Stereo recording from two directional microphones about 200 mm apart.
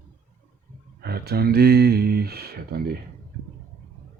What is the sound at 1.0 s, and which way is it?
Speech, 55° right (ahead or behind).